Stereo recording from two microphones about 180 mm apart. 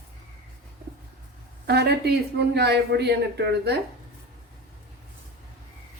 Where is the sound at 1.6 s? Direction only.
65° right (ahead or behind).